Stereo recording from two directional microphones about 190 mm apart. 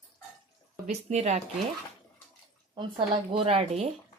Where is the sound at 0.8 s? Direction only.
35° right (ahead or behind).